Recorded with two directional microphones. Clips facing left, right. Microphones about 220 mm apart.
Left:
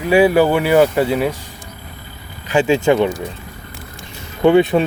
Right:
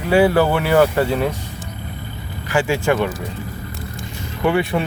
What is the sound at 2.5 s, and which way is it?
Speech, 20° left (ahead or behind).